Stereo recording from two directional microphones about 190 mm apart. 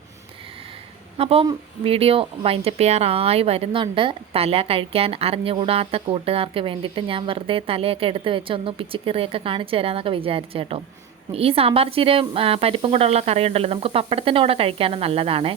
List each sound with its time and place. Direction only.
1.2 s a woman's voice: 30° right (ahead or behind)